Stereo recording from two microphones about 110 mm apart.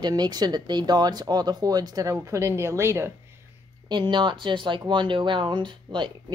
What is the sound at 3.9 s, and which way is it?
Speech, 45° right (ahead or behind).